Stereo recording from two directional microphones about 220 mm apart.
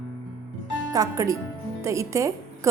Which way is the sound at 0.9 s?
15° right (ahead or behind).